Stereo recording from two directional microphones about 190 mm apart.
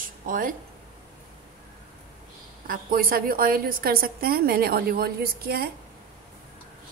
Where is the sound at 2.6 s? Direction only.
50° right (ahead or behind).